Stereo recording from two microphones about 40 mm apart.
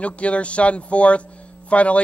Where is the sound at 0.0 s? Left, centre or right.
Left.